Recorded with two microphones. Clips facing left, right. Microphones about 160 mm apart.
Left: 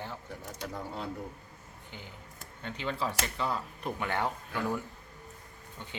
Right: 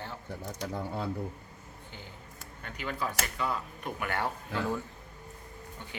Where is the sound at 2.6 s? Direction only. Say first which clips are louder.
Left 1 dB; 25° left (ahead or behind).